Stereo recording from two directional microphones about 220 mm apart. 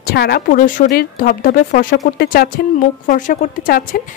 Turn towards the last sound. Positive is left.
turn(degrees=40)  # may be behind; listen again after turning